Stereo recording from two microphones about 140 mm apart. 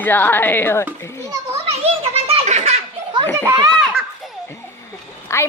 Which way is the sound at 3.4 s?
25° right (ahead or behind).